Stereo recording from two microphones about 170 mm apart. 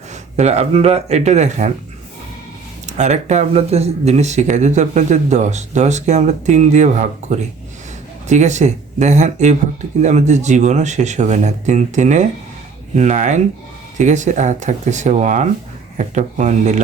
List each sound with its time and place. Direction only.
0.3 s speech: 40° right (ahead or behind)
2.8 s speech: 45° right (ahead or behind)